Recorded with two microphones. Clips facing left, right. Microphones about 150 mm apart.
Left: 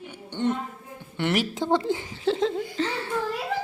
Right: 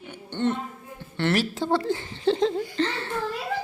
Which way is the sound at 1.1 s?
15° left (ahead or behind).